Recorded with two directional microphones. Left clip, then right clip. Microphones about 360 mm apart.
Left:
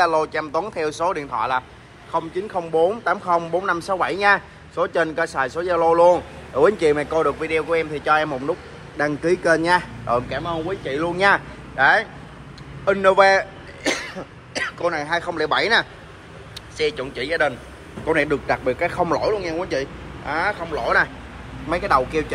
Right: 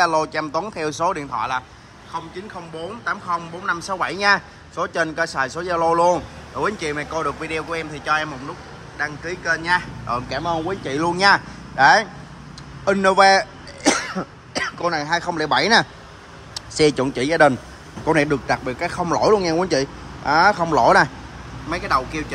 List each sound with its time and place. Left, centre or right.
0.0 s speech: centre
12.8 s cough: centre
14.5 s a man's voice: centre
19.3 s speech: right
21.6 s a man's voice: centre